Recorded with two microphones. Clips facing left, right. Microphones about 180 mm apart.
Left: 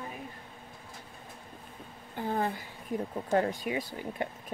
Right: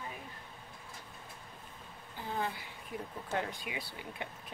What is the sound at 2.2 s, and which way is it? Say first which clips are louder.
Speech: left 6 dB; 55° left (ahead or behind).